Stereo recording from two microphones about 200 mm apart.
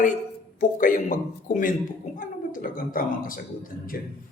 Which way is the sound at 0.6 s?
40° left (ahead or behind).